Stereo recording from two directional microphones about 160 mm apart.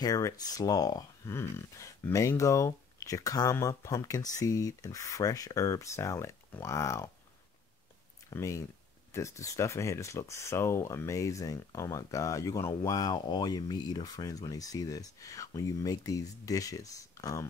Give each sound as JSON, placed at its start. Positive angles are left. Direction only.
{"t": 0.0, "sound": "speech", "side_deg": 25}
{"t": 8.3, "sound": "speech", "side_deg": 20}